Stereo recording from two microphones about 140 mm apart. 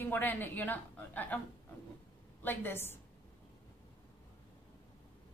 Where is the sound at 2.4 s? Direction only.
15° left (ahead or behind).